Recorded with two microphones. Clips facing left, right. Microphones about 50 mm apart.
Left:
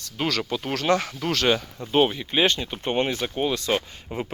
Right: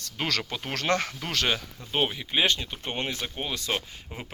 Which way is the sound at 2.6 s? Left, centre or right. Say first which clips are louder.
Left 8 dB; centre.